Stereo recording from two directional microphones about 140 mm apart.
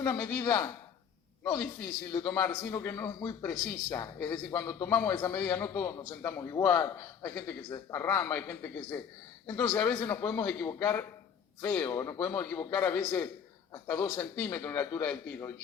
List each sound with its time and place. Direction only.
0.0 s a man's voice: 25° left (ahead or behind)
2.2 s a man's voice: 10° left (ahead or behind)
9.5 s a man's voice: 25° left (ahead or behind)